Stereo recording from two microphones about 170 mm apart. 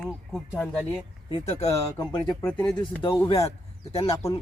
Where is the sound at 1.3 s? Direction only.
40° left (ahead or behind).